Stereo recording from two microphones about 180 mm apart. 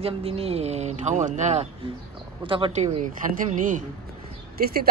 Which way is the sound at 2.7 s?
40° right (ahead or behind).